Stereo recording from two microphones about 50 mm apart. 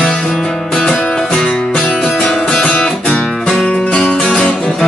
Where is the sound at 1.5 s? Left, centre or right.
Left.